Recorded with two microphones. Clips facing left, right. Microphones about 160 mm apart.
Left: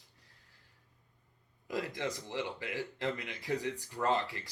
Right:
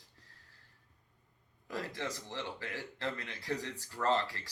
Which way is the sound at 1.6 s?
15° left (ahead or behind).